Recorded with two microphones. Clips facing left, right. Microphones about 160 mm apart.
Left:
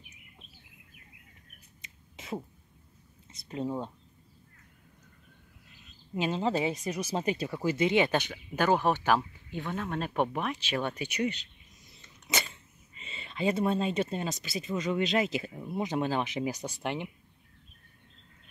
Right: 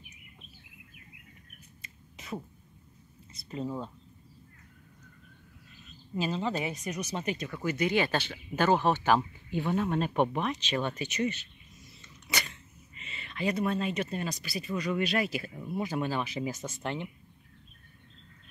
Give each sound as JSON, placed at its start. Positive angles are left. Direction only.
{"t": 1.8, "sound": "a sound", "side_deg": 25}
{"t": 3.4, "sound": "speech", "side_deg": 10}
{"t": 6.1, "sound": "speech", "side_deg": 25}
{"t": 9.5, "sound": "speech", "side_deg": -10}
{"t": 13.0, "sound": "speech", "side_deg": 25}